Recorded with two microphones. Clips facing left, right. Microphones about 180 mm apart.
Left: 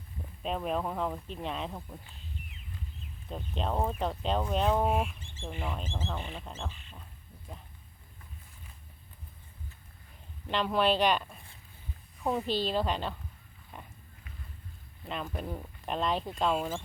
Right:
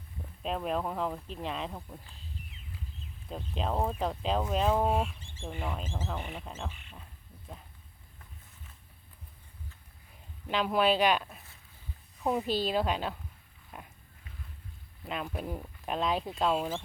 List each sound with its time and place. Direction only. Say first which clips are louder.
0.4 s speech: even; centre (ahead or behind)
3.2 s speech: even; centre (ahead or behind)
4.9 s speech: even; 15° left (ahead or behind)
5.4 s speech: even; 15° right (ahead or behind)
5.7 s speech: even; 5° right (ahead or behind)
6.4 s speech: even; 5° right (ahead or behind)
10.5 s speech: right 1 dB; 5° right (ahead or behind)
12.6 s speech: right 1 dB; 5° right (ahead or behind)
13.7 s pig: even; centre (ahead or behind)
15.0 s speech: right 1 dB; 5° right (ahead or behind)